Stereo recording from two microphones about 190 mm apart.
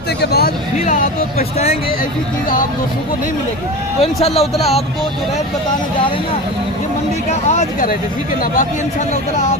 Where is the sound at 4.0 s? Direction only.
35° left (ahead or behind).